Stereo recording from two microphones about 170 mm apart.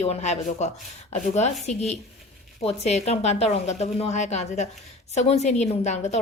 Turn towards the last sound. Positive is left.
turn(degrees=40)  # may be behind; listen again after turning